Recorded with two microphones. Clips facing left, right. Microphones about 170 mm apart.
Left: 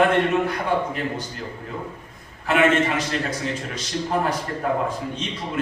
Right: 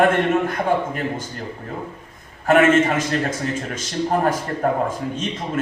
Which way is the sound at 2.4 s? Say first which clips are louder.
Right 4 dB; 45° right (ahead or behind).